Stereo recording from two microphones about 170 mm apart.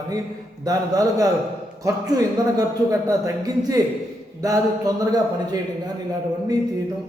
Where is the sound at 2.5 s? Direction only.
20° right (ahead or behind).